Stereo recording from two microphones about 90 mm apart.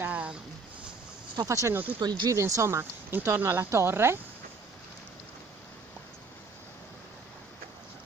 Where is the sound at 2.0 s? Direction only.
50° right (ahead or behind).